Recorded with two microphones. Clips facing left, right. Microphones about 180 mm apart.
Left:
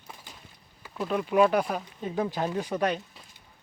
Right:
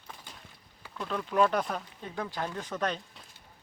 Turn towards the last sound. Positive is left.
turn(degrees=10)  # may be behind; listen again after turning